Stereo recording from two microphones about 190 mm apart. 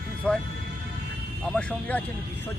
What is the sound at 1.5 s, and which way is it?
Speech, 5° left (ahead or behind).